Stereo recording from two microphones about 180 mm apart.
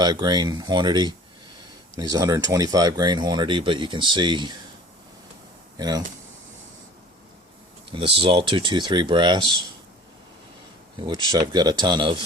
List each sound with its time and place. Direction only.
0.0 s speech: 25° right (ahead or behind)
5.7 s speech: 20° right (ahead or behind)
8.2 s speech: 30° right (ahead or behind)
11.0 s speech: 25° right (ahead or behind)